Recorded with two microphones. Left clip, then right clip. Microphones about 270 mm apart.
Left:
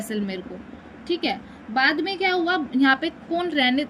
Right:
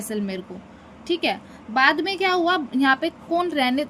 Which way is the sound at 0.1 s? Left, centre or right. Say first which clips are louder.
Right 3 dB; right.